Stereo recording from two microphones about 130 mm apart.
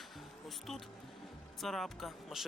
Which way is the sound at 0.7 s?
5° left (ahead or behind).